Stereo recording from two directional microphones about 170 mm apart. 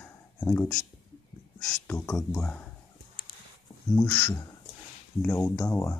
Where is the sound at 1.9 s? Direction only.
20° left (ahead or behind).